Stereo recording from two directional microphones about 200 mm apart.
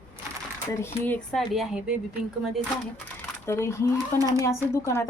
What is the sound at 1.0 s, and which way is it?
Speech, 5° left (ahead or behind).